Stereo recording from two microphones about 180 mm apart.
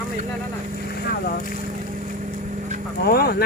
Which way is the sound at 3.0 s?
60° left (ahead or behind).